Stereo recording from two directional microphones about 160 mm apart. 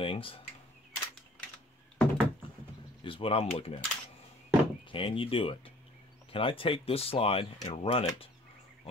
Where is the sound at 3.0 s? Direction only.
35° left (ahead or behind).